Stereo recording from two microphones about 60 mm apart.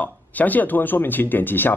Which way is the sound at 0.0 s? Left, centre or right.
Left.